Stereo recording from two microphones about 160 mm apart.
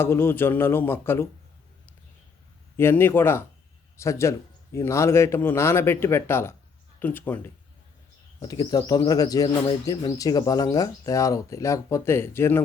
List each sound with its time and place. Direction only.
0.0 s a man's voice: 15° left (ahead or behind)
2.7 s a man's voice: 15° left (ahead or behind)
8.4 s speech: 25° left (ahead or behind)